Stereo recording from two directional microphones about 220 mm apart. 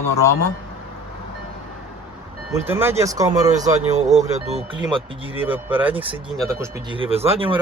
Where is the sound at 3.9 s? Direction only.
30° right (ahead or behind).